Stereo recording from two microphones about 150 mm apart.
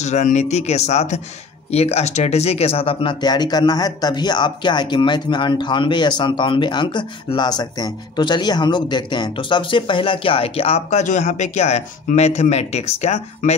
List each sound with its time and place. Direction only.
0.0 s speech: 50° left (ahead or behind)